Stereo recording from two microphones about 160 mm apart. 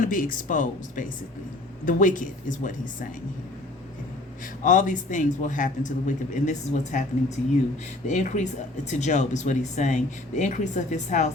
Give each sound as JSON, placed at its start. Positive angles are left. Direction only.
{"t": 0.0, "sound": "speech", "side_deg": 55}
{"t": 4.6, "sound": "speech", "side_deg": 55}
{"t": 8.0, "sound": "speech", "side_deg": 50}